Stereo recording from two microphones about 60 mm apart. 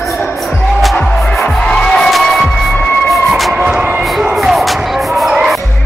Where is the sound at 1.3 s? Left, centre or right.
Centre.